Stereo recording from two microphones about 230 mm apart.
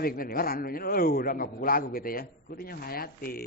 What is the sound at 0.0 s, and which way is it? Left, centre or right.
Speech, left.